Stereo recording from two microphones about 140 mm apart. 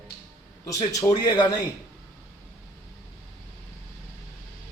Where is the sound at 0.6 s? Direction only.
25° left (ahead or behind).